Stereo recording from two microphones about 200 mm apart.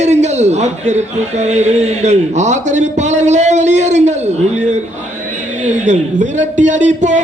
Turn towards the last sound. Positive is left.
turn(degrees=-35)  # may be behind; listen again after turning